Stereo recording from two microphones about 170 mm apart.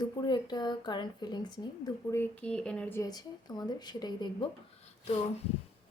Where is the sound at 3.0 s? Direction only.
25° left (ahead or behind).